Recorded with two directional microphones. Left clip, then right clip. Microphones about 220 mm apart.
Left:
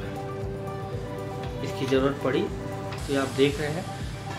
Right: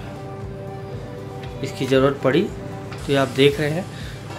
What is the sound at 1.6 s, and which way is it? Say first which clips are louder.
Speech: right 7 dB; 45° right (ahead or behind).